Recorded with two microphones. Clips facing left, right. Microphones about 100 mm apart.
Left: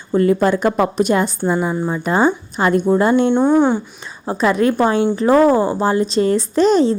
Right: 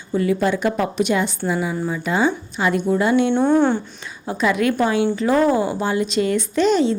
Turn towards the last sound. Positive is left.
turn(degrees=40)  # may be behind; listen again after turning